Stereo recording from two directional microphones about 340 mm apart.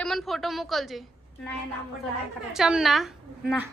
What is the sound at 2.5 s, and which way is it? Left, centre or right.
A woman's voice, centre.